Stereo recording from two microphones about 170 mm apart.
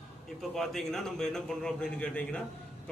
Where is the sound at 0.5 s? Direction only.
Centre (ahead or behind).